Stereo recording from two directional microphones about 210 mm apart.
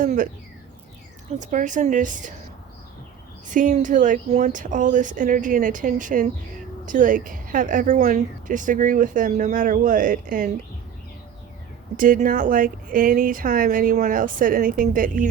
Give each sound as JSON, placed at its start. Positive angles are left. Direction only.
{"t": 0.0, "sound": "a woman's voice", "side_deg": -40}
{"t": 1.4, "sound": "a woman's voice", "side_deg": -35}
{"t": 3.5, "sound": "a woman's voice", "side_deg": -40}
{"t": 11.9, "sound": "a woman's voice", "side_deg": -40}